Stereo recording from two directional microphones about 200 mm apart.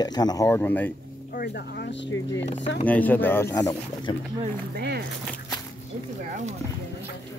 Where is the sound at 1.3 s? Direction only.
50° left (ahead or behind).